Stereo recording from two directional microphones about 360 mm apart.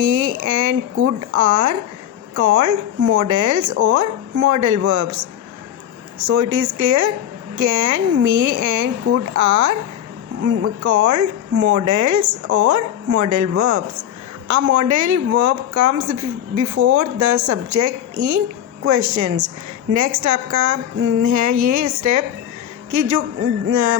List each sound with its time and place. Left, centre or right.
0.0 s speech: right
10.8 s speech: right